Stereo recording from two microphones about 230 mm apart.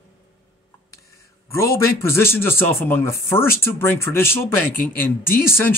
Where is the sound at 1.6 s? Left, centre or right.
Right.